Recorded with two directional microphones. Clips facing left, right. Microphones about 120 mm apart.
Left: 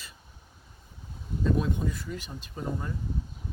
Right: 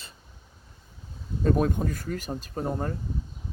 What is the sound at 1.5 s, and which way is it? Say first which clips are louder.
Speech: right 4 dB; 50° right (ahead or behind).